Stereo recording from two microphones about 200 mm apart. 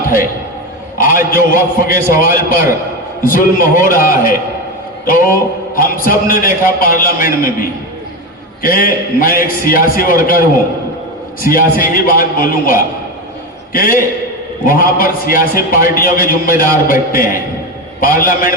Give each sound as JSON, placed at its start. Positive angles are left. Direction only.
{"t": 0.9, "sound": "a man's voice", "side_deg": 45}
{"t": 11.4, "sound": "a man's voice", "side_deg": 45}